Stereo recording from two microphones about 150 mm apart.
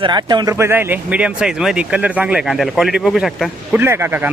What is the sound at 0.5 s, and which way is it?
Speech, 15° right (ahead or behind).